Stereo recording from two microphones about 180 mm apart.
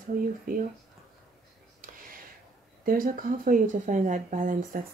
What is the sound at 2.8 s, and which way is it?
Speech, 50° right (ahead or behind).